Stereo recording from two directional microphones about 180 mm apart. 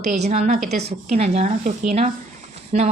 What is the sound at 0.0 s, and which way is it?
A woman's voice, 40° right (ahead or behind).